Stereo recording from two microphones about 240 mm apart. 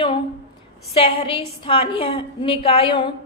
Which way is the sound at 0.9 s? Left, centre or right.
Left.